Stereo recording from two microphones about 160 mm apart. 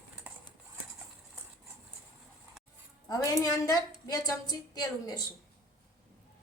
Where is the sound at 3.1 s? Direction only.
20° left (ahead or behind).